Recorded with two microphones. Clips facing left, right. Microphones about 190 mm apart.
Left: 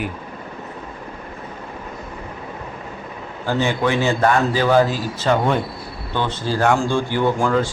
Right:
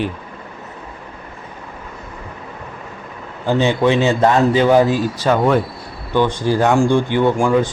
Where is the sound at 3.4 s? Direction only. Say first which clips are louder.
Right 5 dB; 20° right (ahead or behind).